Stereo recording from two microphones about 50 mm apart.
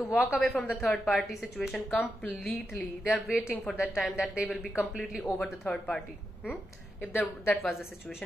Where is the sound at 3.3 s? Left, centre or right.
Centre.